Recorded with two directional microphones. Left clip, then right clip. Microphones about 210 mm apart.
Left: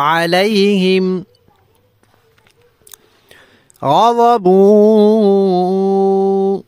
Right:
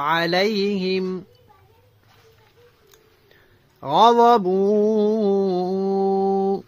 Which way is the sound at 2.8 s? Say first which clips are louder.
Left 9 dB; 50° left (ahead or behind).